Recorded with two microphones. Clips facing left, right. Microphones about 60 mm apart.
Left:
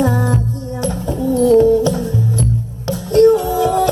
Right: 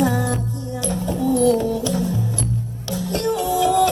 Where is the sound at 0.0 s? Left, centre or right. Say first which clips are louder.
Left 4 dB; left.